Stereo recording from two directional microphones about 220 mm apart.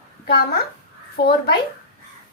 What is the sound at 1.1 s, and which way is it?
Speech, 45° left (ahead or behind).